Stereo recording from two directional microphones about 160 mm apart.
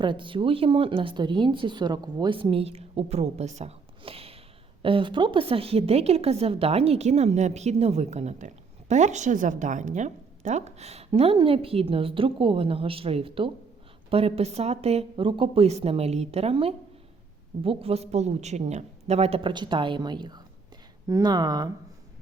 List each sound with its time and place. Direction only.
0.0 s a woman's voice: 30° right (ahead or behind)